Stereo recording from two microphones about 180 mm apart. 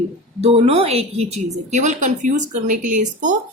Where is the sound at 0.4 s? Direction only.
35° right (ahead or behind).